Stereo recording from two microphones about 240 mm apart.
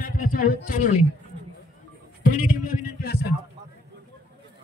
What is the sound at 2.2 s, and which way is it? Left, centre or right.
A man's voice, left.